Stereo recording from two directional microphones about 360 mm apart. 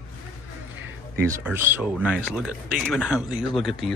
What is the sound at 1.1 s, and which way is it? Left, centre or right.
Speech, centre.